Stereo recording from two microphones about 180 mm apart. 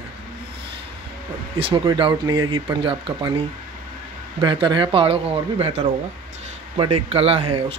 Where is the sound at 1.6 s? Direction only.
25° right (ahead or behind).